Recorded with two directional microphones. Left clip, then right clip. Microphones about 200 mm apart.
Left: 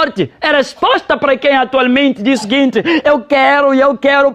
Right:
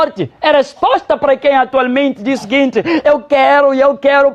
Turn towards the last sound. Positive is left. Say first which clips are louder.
# right 1 dB
turn(degrees=40)  # may be behind; listen again after turning